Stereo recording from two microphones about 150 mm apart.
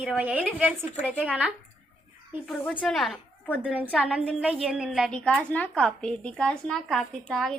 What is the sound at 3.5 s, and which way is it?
A woman's voice, 10° right (ahead or behind).